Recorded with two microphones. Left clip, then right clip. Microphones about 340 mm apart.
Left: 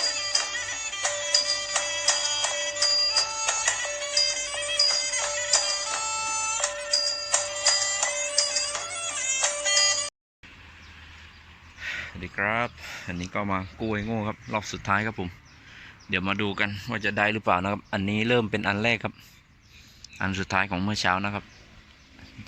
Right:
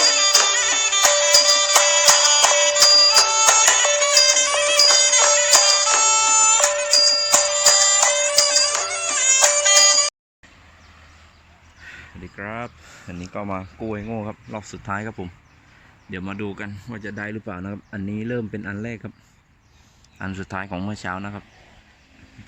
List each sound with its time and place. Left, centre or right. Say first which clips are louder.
0.0 s music: right 11 dB; right
11.8 s speech: left 6 dB; centre
20.1 s speech: left 4 dB; centre